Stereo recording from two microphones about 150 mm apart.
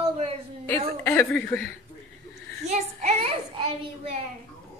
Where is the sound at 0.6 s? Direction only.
15° left (ahead or behind).